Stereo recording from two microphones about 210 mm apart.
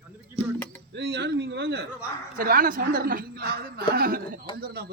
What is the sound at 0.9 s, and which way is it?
A man's voice, 55° right (ahead or behind).